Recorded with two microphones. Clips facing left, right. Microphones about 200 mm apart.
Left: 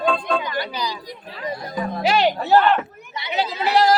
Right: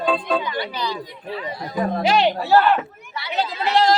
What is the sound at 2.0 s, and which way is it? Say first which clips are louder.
Speech: even; centre (ahead or behind).